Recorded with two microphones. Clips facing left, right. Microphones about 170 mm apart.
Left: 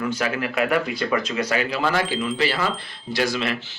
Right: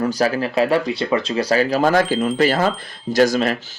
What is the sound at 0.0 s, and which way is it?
Speech, 35° right (ahead or behind).